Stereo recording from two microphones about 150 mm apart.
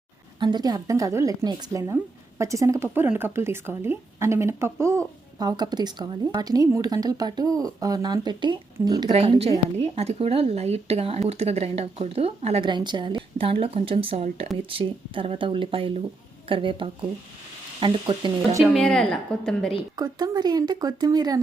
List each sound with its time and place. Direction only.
0.3 s speech: 30° right (ahead or behind)
9.0 s a woman's voice: 40° right (ahead or behind)
12.6 s a woman's voice: 30° right (ahead or behind)
18.6 s a woman's voice: 5° left (ahead or behind)
20.0 s speech: 25° right (ahead or behind)